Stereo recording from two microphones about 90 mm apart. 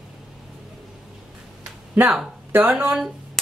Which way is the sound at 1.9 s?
20° right (ahead or behind).